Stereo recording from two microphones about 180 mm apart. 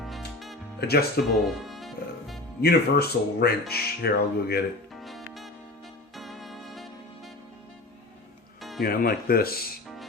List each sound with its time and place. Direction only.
0.8 s speech: 60° left (ahead or behind)
1.5 s music: centre (ahead or behind)
2.6 s speech: 60° left (ahead or behind)
4.9 s music: centre (ahead or behind)
8.8 s speech: 55° left (ahead or behind)